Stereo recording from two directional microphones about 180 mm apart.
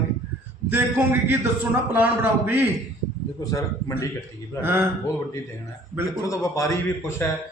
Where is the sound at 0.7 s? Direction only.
10° right (ahead or behind).